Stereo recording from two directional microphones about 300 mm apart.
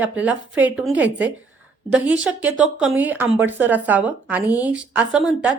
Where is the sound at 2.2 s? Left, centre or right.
Centre.